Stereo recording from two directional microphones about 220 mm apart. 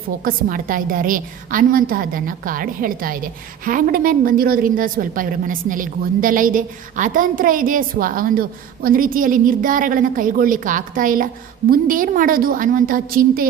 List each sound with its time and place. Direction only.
0.3 s speech: 40° right (ahead or behind)